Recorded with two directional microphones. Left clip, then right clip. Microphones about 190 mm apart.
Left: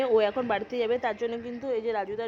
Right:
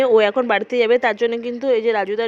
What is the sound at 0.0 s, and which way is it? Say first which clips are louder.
Speech: right 9 dB; 25° right (ahead or behind).